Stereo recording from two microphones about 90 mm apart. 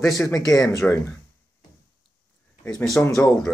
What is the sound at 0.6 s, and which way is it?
Speech, 30° left (ahead or behind).